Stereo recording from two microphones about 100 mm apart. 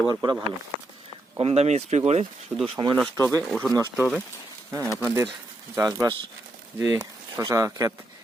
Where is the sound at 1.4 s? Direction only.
90° right.